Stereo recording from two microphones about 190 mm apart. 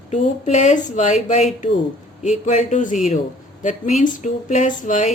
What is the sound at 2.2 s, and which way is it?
A woman's voice, 40° left (ahead or behind).